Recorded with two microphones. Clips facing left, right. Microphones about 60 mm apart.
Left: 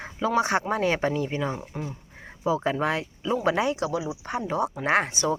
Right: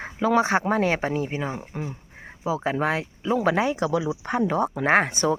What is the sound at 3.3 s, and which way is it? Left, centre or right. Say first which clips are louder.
Speech: right 2 dB; right.